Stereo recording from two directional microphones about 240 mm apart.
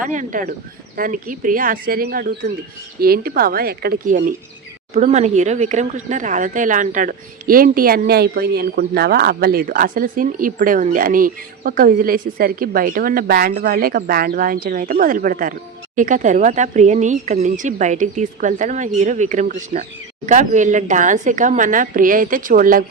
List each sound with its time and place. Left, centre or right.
0.0 s speech: right